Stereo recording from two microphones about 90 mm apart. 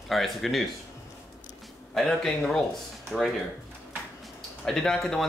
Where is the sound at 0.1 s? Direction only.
Centre (ahead or behind).